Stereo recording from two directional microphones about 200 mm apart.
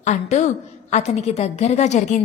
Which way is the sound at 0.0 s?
35° left (ahead or behind).